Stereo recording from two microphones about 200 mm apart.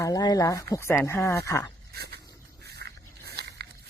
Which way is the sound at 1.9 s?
55° right (ahead or behind).